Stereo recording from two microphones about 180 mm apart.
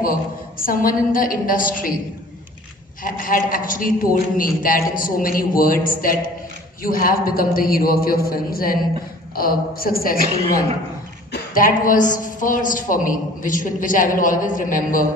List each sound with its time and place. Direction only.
0.0 s a woman's voice: 50° left (ahead or behind)
3.0 s a woman's voice: 50° left (ahead or behind)
10.2 s a woman's voice: 35° right (ahead or behind)
11.3 s a woman's voice: 50° left (ahead or behind)